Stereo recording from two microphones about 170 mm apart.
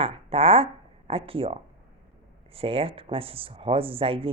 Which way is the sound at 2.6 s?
35° right (ahead or behind).